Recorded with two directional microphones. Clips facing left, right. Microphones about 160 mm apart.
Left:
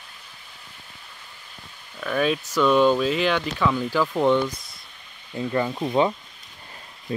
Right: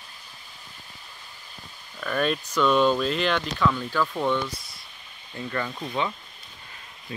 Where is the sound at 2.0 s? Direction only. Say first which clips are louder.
Left 3 dB; 5° left (ahead or behind); by 6.1 s 30° left (ahead or behind).